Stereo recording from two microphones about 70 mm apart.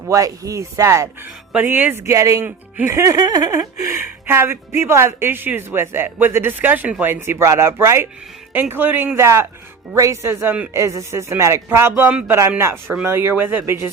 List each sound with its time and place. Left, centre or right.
0.1 s speech: right
1.2 s speech: right
2.0 s speech: right
2.4 s speech: right
2.9 s speech: right
3.2 s speech: right